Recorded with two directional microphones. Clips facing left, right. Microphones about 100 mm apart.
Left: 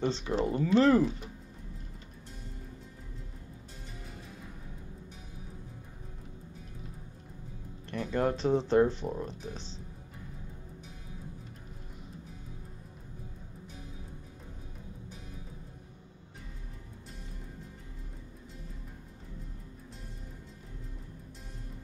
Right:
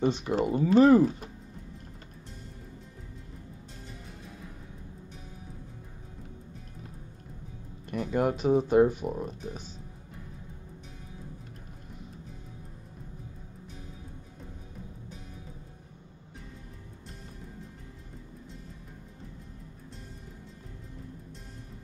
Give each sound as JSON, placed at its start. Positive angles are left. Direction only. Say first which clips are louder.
{"t": 0.0, "sound": "speech", "louder": "right 3 dB", "side_deg": -15}
{"t": 7.9, "sound": "speech", "louder": "right 2 dB", "side_deg": -15}